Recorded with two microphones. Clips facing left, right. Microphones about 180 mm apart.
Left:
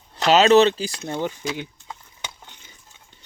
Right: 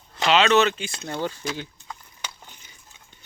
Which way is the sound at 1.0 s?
20° left (ahead or behind).